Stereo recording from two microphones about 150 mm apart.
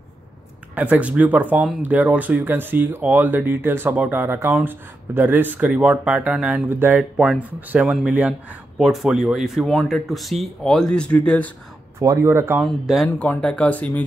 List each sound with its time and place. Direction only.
0.7 s speech: 10° right (ahead or behind); by 11.5 s 10° left (ahead or behind)
12.0 s speech: 20° right (ahead or behind)
12.6 s speech: centre (ahead or behind)